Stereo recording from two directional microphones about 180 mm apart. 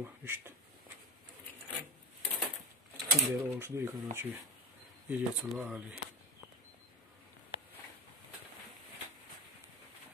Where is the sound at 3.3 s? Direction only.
15° right (ahead or behind).